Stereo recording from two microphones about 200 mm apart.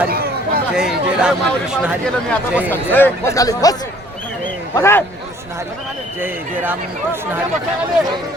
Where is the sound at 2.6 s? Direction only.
10° left (ahead or behind).